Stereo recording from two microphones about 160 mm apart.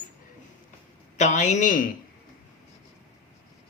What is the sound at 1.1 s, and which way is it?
Speech, 50° left (ahead or behind).